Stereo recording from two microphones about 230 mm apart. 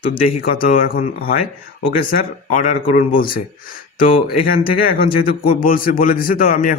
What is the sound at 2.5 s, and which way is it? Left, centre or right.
Speech, left.